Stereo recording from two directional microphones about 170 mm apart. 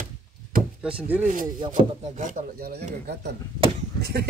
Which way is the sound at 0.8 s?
5° right (ahead or behind).